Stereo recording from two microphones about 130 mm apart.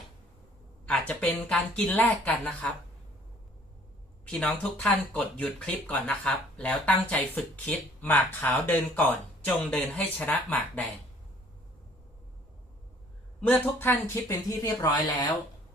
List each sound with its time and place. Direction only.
0.9 s speech: 10° left (ahead or behind)
4.3 s speech: 10° left (ahead or behind)
13.4 s speech: 15° left (ahead or behind)